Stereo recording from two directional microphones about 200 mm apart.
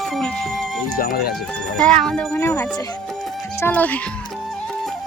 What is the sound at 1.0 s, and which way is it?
Speech, 50° left (ahead or behind).